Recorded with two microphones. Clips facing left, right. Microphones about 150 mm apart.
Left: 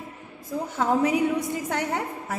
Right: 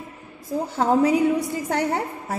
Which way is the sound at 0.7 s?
30° right (ahead or behind).